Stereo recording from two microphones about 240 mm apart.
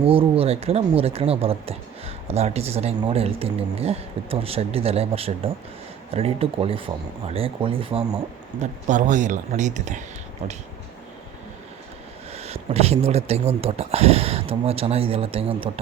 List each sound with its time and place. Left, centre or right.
0.0 s speech: right
12.3 s speech: right